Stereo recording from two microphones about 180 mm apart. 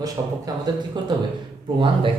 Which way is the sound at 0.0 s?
20° right (ahead or behind).